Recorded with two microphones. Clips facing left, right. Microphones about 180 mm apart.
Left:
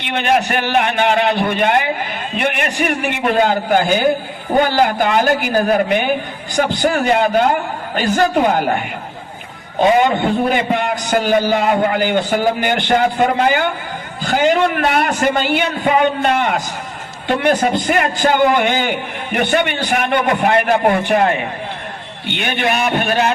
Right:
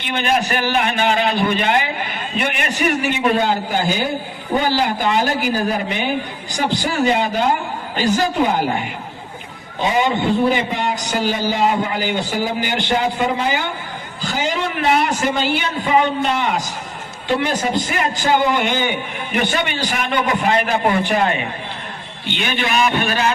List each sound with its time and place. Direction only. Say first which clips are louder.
0.0 s a man's voice: left 3 dB; 65° left (ahead or behind)
10.5 s a man's voice: left 3 dB; 55° left (ahead or behind)